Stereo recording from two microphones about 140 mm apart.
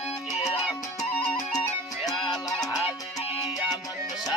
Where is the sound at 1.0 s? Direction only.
60° left (ahead or behind).